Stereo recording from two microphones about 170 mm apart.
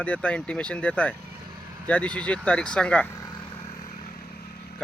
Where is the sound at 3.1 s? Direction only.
25° left (ahead or behind).